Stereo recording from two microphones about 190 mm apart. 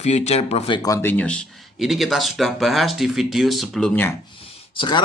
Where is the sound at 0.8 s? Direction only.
15° left (ahead or behind).